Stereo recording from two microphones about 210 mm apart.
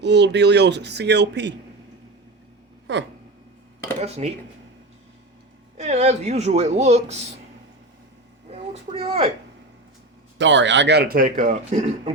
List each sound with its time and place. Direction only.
0.0 s speech: 55° right (ahead or behind)
2.9 s a sound: 60° right (ahead or behind)
4.0 s speech: 30° right (ahead or behind)
5.7 s speech: 30° right (ahead or behind)
8.5 s a man's voice: 30° right (ahead or behind)
10.3 s a man's voice: 60° right (ahead or behind); by 12.1 s 35° right (ahead or behind)